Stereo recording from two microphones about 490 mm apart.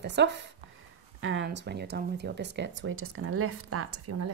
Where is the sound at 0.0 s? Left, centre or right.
Right.